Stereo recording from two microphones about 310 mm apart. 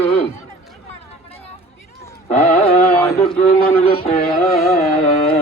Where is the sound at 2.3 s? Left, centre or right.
Centre.